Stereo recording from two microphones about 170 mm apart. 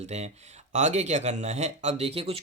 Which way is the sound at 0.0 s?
40° right (ahead or behind).